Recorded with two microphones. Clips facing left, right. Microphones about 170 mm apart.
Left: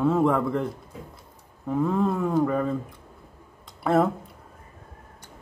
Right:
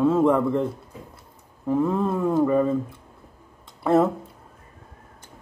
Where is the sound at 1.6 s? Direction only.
5° right (ahead or behind).